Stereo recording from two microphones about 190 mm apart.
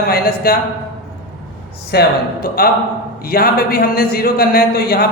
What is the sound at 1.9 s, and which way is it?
Speech, 55° left (ahead or behind).